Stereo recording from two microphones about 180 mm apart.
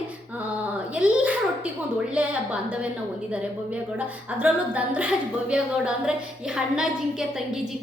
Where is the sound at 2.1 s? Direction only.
5° right (ahead or behind).